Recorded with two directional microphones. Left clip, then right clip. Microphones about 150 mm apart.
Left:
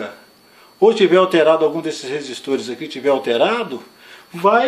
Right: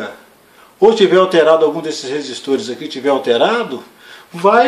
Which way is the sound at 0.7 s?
40° left (ahead or behind).